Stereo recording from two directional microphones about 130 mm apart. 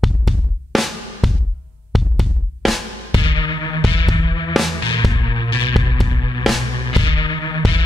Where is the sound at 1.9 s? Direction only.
Centre (ahead or behind).